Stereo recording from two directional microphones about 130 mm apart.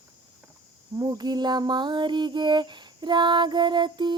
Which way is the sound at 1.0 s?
30° right (ahead or behind).